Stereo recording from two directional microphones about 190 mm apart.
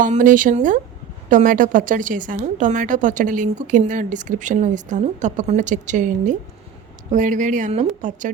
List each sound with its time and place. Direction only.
0.0 s a woman's voice: 45° right (ahead or behind)